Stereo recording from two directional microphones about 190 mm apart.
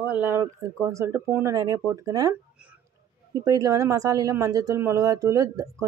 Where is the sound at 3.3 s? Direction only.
20° right (ahead or behind).